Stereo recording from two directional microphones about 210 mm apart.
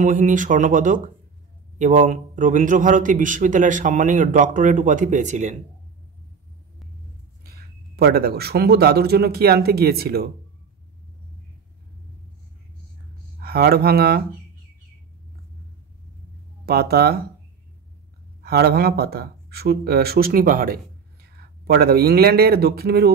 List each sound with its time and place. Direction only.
0.0 s a man's voice: 35° right (ahead or behind)
7.4 s speech: 50° right (ahead or behind)
13.4 s speech: 45° right (ahead or behind)
16.6 s speech: 50° right (ahead or behind)
18.4 s speech: 50° right (ahead or behind)